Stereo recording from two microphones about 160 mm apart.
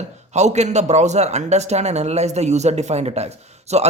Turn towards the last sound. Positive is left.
turn(degrees=-45)  # may be behind; listen again after turning